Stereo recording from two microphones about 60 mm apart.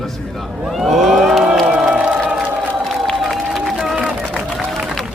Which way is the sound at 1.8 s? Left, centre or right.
Centre.